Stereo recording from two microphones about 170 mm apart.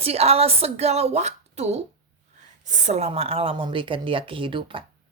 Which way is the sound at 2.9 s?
40° right (ahead or behind).